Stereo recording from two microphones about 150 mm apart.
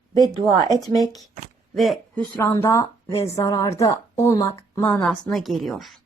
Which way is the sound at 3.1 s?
40° left (ahead or behind).